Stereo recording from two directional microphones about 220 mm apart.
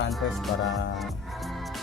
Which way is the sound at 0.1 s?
Centre (ahead or behind).